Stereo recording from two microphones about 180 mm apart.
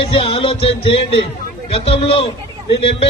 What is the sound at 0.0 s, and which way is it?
Music, 30° left (ahead or behind).